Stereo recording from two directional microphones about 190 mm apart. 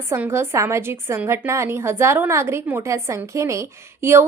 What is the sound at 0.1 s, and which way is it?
Speech, 15° right (ahead or behind).